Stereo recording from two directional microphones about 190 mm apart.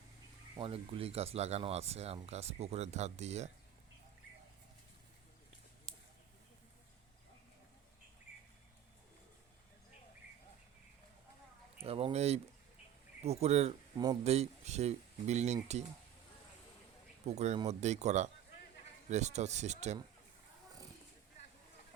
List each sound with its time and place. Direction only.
0.5 s speech: 30° right (ahead or behind)
11.8 s a sound: 30° right (ahead or behind)
13.2 s speech: 35° right (ahead or behind)
13.9 s speech: 20° right (ahead or behind)
14.3 s speech: 35° right (ahead or behind)
17.2 s speech: 35° right (ahead or behind)